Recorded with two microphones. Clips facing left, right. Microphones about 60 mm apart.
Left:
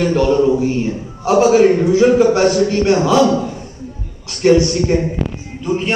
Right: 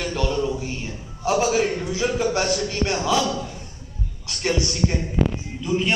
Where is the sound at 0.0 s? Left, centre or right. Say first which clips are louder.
Left 11 dB; left.